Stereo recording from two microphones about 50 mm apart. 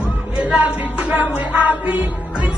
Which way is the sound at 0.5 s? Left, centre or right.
Right.